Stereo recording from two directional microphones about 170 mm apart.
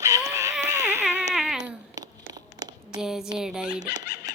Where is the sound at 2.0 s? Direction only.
25° right (ahead or behind).